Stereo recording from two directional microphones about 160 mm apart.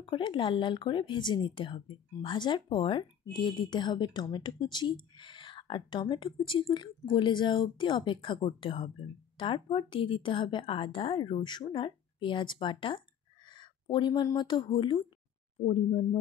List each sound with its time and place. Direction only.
0.0 s speech: 30° left (ahead or behind)